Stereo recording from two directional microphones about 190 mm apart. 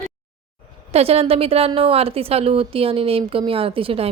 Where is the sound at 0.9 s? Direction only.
30° right (ahead or behind).